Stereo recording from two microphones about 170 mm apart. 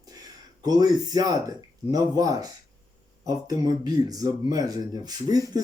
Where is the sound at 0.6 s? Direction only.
25° right (ahead or behind).